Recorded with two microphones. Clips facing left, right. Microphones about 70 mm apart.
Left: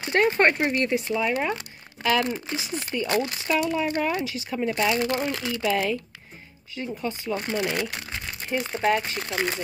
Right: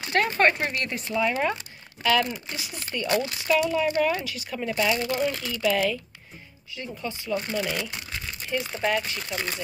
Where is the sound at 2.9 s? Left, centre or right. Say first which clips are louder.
Even; centre.